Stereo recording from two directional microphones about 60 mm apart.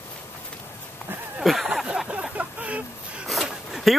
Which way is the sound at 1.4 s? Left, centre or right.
Centre.